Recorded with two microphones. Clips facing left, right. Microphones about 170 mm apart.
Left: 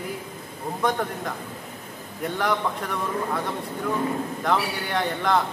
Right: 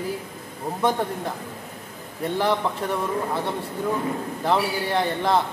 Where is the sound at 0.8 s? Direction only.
30° right (ahead or behind).